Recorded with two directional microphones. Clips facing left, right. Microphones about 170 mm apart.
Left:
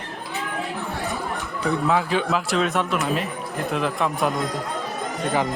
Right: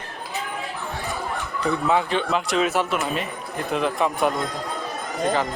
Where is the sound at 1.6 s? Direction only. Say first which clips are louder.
Even; 5° left (ahead or behind).